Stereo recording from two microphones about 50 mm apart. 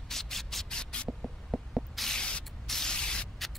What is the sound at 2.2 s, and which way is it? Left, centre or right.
Spray, centre.